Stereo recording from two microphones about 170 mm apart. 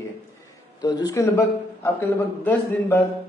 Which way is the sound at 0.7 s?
25° left (ahead or behind).